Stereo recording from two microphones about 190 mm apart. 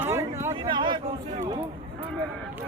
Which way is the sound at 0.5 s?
25° right (ahead or behind).